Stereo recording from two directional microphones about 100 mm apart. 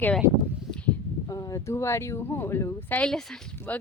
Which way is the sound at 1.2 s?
35° left (ahead or behind).